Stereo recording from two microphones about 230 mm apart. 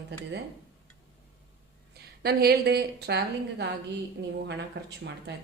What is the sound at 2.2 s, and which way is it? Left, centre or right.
A woman's voice, right.